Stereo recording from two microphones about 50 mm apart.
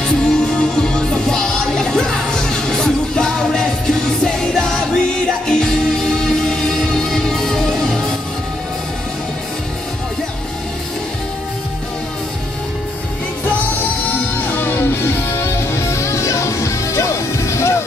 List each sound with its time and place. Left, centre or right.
0.0 s music: centre
14.1 s music: left
15.3 s music: left